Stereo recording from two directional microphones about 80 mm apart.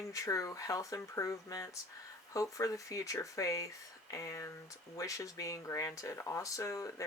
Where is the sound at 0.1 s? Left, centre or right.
Left.